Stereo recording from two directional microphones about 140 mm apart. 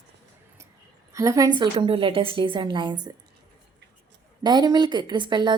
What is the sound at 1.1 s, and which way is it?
Speech, 20° right (ahead or behind).